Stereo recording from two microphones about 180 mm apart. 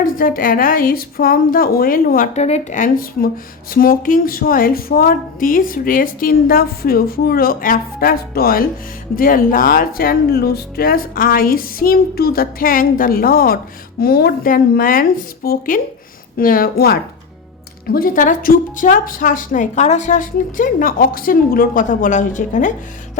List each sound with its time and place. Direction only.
0.0 s a woman's voice: 50° left (ahead or behind)